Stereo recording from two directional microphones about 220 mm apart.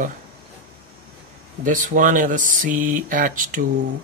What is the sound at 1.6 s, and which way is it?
Speech, 35° right (ahead or behind).